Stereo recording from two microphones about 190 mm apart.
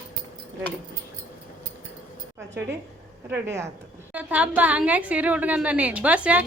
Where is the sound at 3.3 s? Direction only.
15° right (ahead or behind).